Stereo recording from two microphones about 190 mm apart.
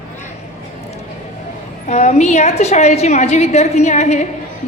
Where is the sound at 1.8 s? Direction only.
35° left (ahead or behind).